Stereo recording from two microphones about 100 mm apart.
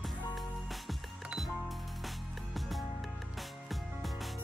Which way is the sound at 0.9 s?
Centre (ahead or behind).